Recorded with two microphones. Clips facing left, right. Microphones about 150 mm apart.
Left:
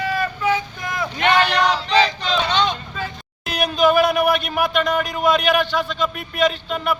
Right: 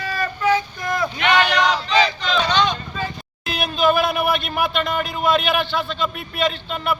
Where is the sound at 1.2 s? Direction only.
30° left (ahead or behind).